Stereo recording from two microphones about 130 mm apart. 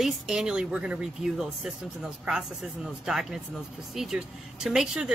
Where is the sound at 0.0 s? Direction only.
5° right (ahead or behind).